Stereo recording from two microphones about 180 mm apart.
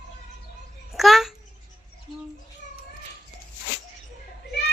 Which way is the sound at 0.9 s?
Centre (ahead or behind).